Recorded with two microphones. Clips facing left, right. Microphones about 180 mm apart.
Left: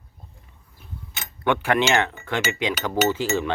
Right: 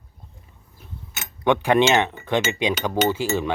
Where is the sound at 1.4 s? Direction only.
15° right (ahead or behind).